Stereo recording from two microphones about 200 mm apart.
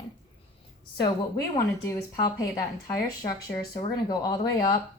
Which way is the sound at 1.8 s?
15° left (ahead or behind).